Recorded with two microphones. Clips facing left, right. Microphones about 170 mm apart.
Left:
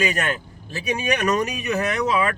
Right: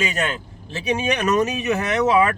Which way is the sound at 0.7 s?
25° right (ahead or behind).